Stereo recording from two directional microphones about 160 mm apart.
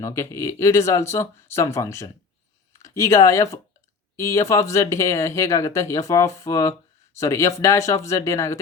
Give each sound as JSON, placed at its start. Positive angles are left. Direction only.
{"t": 0.0, "sound": "speech", "side_deg": 15}